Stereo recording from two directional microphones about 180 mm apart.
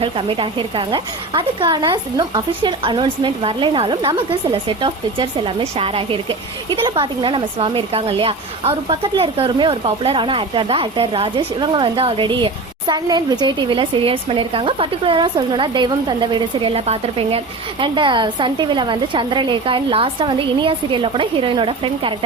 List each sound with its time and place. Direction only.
0.9 s speech: 25° right (ahead or behind)